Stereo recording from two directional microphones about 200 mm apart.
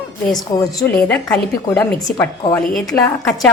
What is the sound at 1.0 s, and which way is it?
A woman's voice, 5° left (ahead or behind).